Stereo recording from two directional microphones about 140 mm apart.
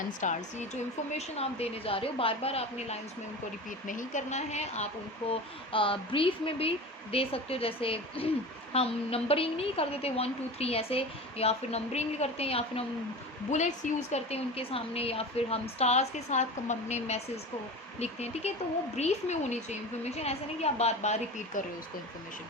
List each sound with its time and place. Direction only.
0.1 s speech: 60° left (ahead or behind)
1.4 s a woman's voice: 45° left (ahead or behind)
3.8 s a woman's voice: 65° left (ahead or behind)
5.3 s a woman's voice: 40° left (ahead or behind)
13.5 s a woman's voice: 60° left (ahead or behind)